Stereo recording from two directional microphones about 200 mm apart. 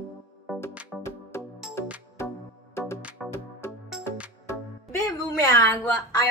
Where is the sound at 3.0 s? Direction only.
5° right (ahead or behind).